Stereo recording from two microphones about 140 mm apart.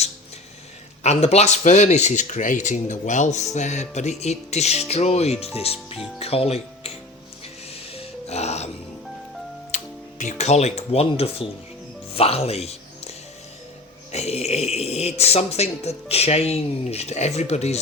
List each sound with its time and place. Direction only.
1.0 s speech: 50° left (ahead or behind)
7.7 s music: 45° left (ahead or behind)
9.7 s speech: 60° left (ahead or behind)